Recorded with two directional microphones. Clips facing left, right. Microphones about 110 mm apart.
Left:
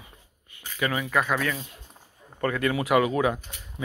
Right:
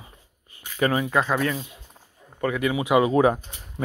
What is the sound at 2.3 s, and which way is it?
Speech, 10° right (ahead or behind).